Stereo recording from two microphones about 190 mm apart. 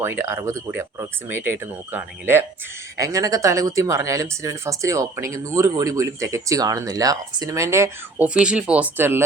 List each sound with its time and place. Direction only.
0.0 s speech: 15° right (ahead or behind)